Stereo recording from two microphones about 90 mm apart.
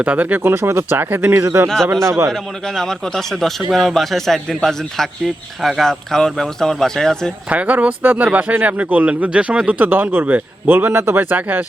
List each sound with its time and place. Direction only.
0.0 s a man's voice: 15° right (ahead or behind)
2.3 s a man's voice: 5° left (ahead or behind)
7.5 s speech: 15° right (ahead or behind)